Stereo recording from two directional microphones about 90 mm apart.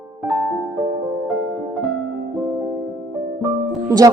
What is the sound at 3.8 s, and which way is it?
Speech, 45° right (ahead or behind).